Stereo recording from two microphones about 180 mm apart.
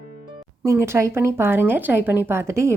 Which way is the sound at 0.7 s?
15° right (ahead or behind).